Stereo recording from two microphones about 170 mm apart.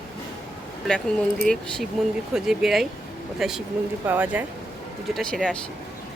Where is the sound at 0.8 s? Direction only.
Centre (ahead or behind).